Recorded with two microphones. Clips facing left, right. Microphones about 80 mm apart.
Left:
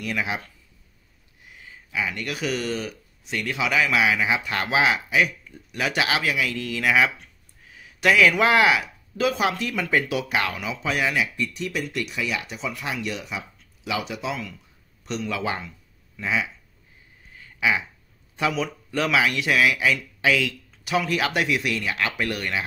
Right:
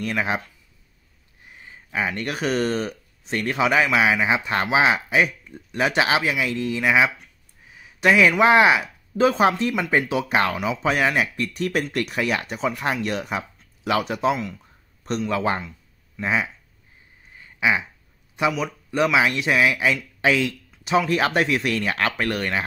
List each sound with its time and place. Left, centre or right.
0.0 s speech: right
1.4 s speech: right
14.3 s speech: right
15.0 s speech: right
17.4 s a sound: right
18.6 s speech: centre; by 22.7 s right